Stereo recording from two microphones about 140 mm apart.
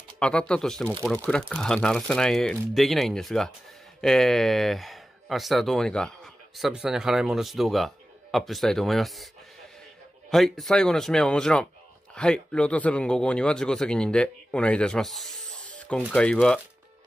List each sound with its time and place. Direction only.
0.2 s speech: 5° left (ahead or behind)
10.3 s speech: centre (ahead or behind)